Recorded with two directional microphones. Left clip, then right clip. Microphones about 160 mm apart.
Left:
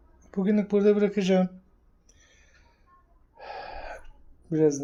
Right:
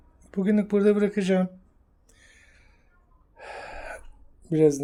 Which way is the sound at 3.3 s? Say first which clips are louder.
Even; 10° right (ahead or behind).